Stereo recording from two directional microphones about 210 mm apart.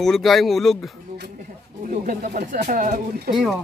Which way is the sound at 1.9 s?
35° right (ahead or behind).